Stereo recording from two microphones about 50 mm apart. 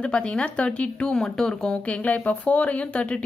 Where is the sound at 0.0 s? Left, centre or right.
Centre.